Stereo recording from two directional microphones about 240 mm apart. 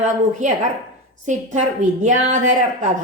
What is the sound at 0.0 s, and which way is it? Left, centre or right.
Speech, right.